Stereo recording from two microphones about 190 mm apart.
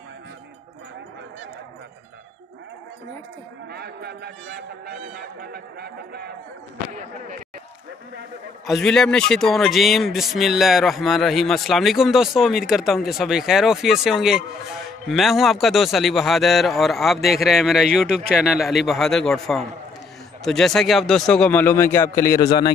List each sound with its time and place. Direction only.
3.7 s speech: 60° right (ahead or behind)
8.8 s a man's voice: 5° left (ahead or behind); by 22.7 s 20° left (ahead or behind)